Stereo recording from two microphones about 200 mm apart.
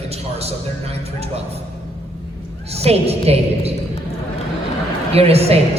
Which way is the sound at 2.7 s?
30° right (ahead or behind).